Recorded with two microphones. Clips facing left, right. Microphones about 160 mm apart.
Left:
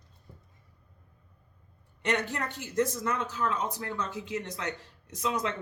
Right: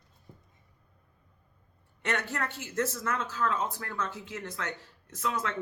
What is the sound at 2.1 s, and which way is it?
Speech, 15° left (ahead or behind).